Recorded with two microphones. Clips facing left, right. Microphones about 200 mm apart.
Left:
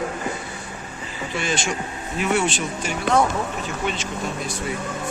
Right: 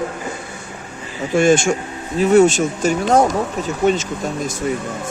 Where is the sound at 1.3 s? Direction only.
50° right (ahead or behind).